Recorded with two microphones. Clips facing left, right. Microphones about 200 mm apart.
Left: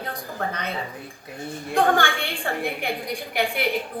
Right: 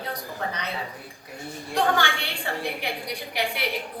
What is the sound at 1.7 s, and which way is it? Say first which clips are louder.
A woman's voice: left 3 dB; 50° left (ahead or behind).